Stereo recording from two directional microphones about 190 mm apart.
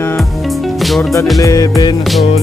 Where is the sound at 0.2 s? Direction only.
Centre (ahead or behind).